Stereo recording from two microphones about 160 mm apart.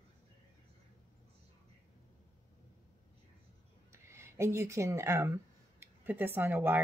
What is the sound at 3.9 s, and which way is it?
Speech, 15° right (ahead or behind).